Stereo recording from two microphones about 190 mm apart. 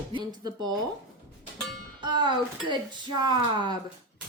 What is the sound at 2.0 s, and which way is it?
Speech, 25° right (ahead or behind).